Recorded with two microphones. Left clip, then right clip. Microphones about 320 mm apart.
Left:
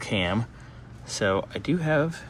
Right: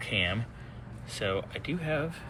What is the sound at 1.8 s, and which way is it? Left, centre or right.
Speech, left.